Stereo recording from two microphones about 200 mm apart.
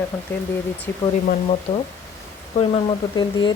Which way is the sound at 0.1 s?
10° left (ahead or behind).